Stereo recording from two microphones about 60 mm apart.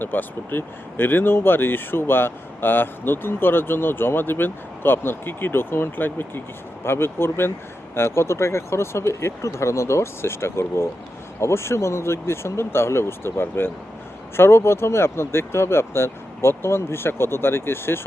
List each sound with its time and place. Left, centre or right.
0.0 s speech: left